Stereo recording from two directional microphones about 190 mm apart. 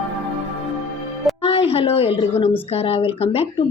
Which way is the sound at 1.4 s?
30° left (ahead or behind).